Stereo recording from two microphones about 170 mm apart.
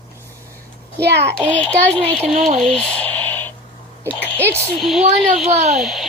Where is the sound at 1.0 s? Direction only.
80° right.